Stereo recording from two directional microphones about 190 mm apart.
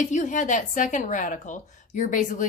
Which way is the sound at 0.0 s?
40° left (ahead or behind).